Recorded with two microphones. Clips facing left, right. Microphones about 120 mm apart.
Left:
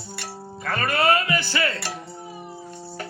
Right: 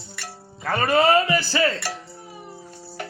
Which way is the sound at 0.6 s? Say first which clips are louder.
Right 3 dB; 20° right (ahead or behind).